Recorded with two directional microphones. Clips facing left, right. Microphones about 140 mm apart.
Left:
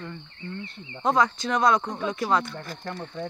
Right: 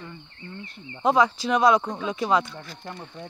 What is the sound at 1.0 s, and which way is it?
Speech, 5° right (ahead or behind).